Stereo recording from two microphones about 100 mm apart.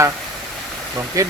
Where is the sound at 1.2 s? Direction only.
35° right (ahead or behind).